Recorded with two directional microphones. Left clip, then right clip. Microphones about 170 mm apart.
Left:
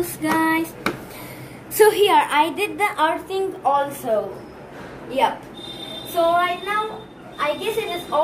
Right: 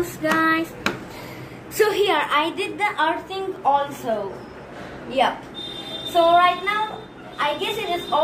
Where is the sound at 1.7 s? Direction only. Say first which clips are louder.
Left 4 dB; 85° left.